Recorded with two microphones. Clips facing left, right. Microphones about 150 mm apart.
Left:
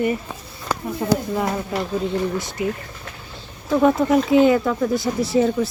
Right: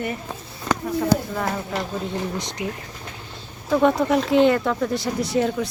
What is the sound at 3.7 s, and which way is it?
Speech, 5° left (ahead or behind).